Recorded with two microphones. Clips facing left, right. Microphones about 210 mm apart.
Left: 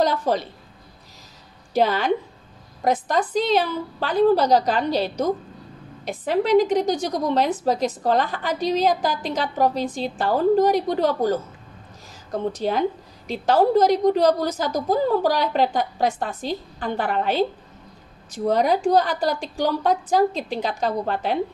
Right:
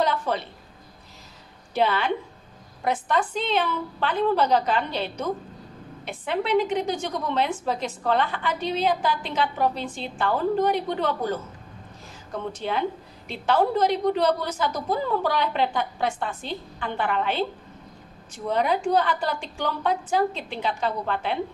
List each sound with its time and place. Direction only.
0.0 s a woman's voice: 40° left (ahead or behind)
1.7 s a woman's voice: 40° left (ahead or behind)